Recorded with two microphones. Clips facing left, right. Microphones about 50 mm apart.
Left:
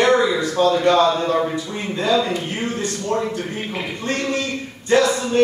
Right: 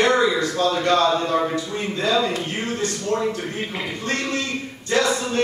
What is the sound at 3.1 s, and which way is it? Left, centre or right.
Speech, centre.